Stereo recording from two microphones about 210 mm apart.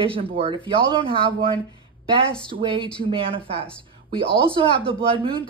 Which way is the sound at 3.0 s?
25° right (ahead or behind).